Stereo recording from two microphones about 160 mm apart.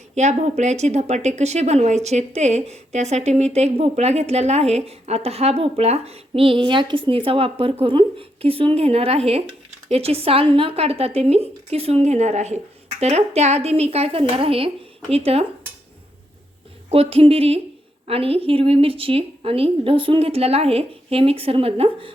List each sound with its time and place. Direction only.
0.1 s a woman's voice: 45° right (ahead or behind)
16.9 s a woman's voice: 40° right (ahead or behind)